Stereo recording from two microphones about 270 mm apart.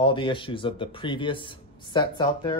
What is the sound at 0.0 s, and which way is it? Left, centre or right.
Speech, centre.